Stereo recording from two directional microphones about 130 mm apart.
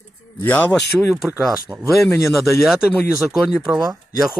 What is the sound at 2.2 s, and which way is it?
Speech, centre (ahead or behind).